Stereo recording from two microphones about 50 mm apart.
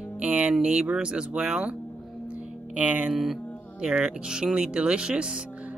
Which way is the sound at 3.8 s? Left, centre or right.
Centre.